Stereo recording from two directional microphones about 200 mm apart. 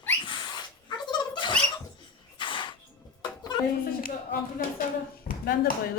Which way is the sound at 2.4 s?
25° left (ahead or behind).